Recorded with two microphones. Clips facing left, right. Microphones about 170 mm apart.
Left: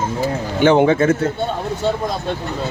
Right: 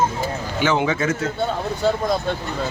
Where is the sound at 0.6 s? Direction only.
55° left (ahead or behind).